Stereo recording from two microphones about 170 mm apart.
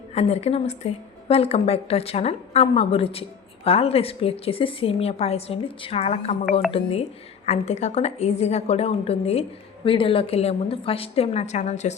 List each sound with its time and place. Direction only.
0.1 s a woman's voice: 40° left (ahead or behind)